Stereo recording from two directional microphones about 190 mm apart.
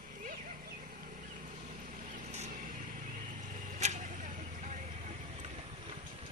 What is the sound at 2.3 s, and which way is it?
Vehicle, 40° right (ahead or behind).